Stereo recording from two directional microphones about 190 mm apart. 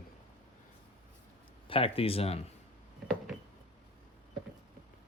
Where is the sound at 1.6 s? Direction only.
30° left (ahead or behind).